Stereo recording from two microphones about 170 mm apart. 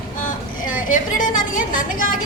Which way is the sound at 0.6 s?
50° left (ahead or behind).